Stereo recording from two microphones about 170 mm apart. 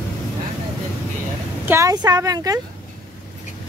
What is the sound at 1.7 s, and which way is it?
Speech, 20° right (ahead or behind).